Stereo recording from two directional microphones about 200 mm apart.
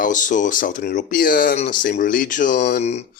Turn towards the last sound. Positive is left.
turn(degrees=35)  # may be behind; listen again after turning